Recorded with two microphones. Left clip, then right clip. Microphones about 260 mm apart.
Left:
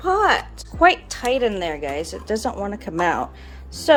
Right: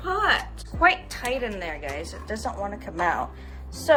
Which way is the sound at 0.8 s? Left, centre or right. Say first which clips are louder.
Left 5 dB; left.